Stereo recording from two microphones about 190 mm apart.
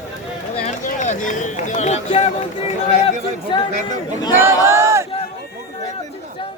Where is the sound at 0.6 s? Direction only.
40° left (ahead or behind).